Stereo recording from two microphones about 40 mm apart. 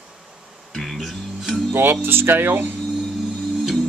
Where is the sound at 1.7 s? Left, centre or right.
Right.